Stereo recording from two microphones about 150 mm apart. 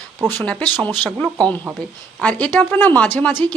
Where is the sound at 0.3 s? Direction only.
10° left (ahead or behind).